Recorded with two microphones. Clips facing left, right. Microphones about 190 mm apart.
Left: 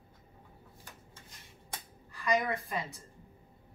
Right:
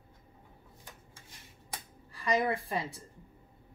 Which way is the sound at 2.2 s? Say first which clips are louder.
Right 1 dB; 30° right (ahead or behind).